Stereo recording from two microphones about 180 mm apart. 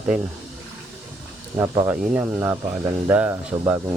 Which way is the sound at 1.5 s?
15° right (ahead or behind).